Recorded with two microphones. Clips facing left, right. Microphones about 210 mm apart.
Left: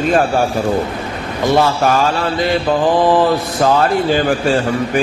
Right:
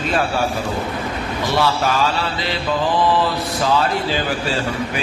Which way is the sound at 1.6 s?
50° left (ahead or behind).